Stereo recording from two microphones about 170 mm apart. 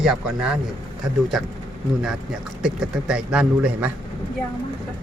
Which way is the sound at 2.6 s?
5° right (ahead or behind).